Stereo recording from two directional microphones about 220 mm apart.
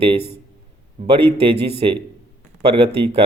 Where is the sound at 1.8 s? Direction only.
25° right (ahead or behind).